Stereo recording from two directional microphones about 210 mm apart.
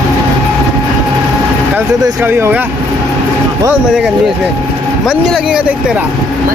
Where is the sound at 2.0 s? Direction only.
10° right (ahead or behind).